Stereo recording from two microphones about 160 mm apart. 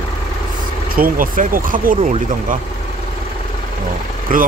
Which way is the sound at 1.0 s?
60° right (ahead or behind).